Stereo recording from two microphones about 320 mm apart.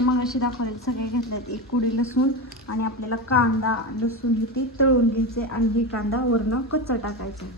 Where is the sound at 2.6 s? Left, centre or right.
Left.